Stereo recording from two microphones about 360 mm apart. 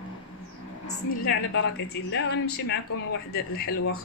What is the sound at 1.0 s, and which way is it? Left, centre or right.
A woman's voice, left.